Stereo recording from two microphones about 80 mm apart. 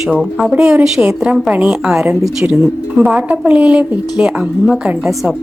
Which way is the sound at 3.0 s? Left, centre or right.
Centre.